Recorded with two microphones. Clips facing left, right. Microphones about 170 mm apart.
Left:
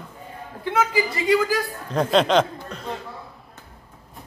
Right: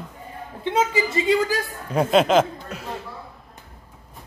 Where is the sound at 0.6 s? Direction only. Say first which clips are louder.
Even; 25° right (ahead or behind).